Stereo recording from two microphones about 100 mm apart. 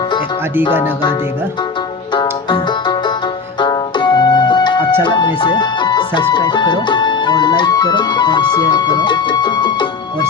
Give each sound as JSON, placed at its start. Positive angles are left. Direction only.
{"t": 2.1, "sound": "music", "side_deg": 50}
{"t": 5.0, "sound": "speech", "side_deg": 50}